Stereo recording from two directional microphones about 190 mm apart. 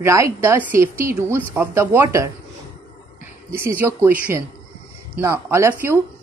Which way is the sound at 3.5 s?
15° right (ahead or behind).